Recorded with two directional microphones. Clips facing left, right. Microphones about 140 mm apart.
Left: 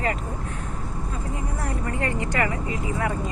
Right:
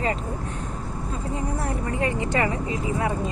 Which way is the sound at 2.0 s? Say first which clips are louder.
Right 2 dB; 20° right (ahead or behind).